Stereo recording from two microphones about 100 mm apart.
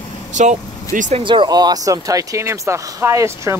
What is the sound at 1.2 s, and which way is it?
Speech, 50° right (ahead or behind).